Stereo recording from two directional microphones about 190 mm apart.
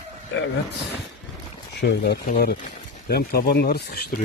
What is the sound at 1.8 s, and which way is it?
Speech, 60° left (ahead or behind).